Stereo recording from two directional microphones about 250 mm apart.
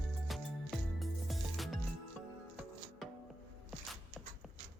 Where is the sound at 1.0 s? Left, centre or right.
Centre.